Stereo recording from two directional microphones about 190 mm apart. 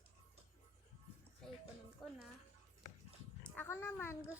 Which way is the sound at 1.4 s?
5° left (ahead or behind).